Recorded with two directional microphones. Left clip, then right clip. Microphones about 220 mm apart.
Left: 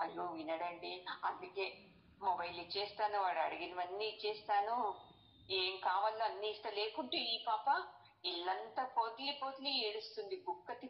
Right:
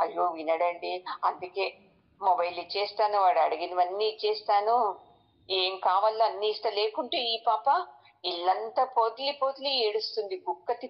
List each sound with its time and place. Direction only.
0.0 s a woman's voice: 45° right (ahead or behind)